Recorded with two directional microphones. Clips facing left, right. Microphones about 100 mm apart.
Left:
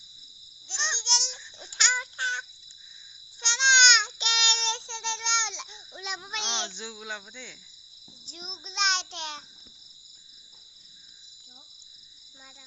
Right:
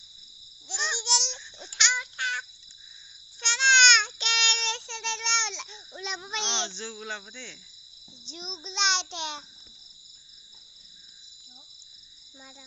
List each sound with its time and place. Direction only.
0.7 s babbling: 5° right (ahead or behind)
1.8 s a sound: 40° left (ahead or behind)
3.4 s child singing: 20° left (ahead or behind)
6.0 s cricket: 5° left (ahead or behind)
8.3 s child singing: 5° left (ahead or behind)